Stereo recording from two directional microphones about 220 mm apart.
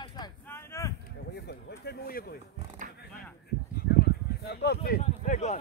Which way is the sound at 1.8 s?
45° left (ahead or behind).